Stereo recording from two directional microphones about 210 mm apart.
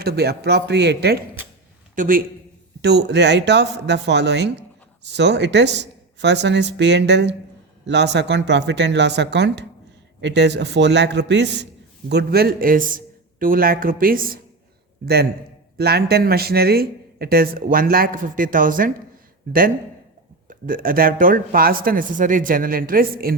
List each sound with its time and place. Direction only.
0.0 s speech: 50° right (ahead or behind)
2.8 s a man's voice: 55° right (ahead or behind)
20.5 s speech: 40° right (ahead or behind)